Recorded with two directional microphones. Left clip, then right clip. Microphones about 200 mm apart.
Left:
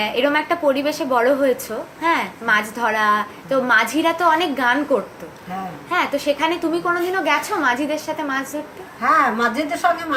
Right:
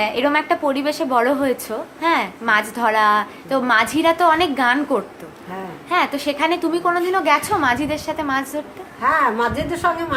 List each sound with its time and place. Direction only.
0.0 s a woman's voice: 10° right (ahead or behind)